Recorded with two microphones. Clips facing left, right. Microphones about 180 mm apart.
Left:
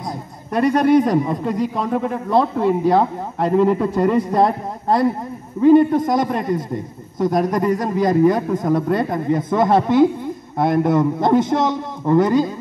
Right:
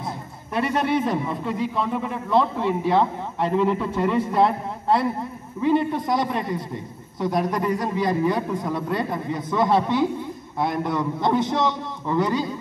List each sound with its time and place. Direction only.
0.6 s a man's voice: 40° left (ahead or behind)